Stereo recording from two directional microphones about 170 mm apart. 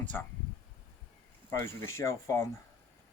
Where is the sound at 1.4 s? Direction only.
15° left (ahead or behind).